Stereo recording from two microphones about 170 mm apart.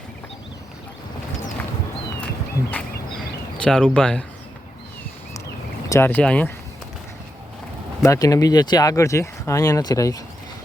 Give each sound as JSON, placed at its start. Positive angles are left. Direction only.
{"t": 2.8, "sound": "a sound", "side_deg": 10}
{"t": 3.6, "sound": "speech", "side_deg": 5}
{"t": 5.9, "sound": "speech", "side_deg": 10}
{"t": 8.0, "sound": "speech", "side_deg": 20}